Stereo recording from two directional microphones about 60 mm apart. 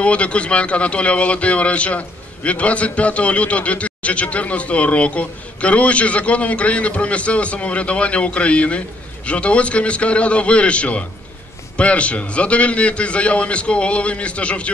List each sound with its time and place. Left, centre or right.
0.0 s a man's voice: left